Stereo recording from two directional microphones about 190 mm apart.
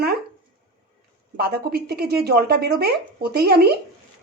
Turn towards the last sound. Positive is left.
turn(degrees=-55)  # may be behind; listen again after turning